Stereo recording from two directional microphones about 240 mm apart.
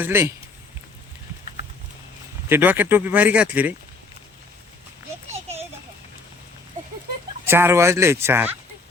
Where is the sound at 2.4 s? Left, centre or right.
Centre.